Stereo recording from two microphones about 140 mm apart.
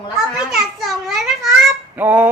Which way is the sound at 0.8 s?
Centre (ahead or behind).